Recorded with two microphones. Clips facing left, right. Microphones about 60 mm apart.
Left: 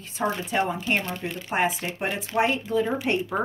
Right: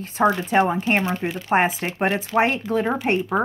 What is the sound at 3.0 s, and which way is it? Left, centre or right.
Speech, right.